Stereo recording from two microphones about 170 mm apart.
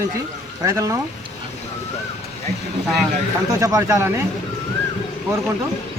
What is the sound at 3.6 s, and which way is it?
Speech, 20° right (ahead or behind).